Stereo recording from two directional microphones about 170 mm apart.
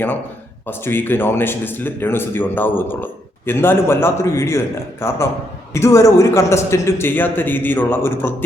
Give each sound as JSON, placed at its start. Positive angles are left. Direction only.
{"t": 0.7, "sound": "speech", "side_deg": 10}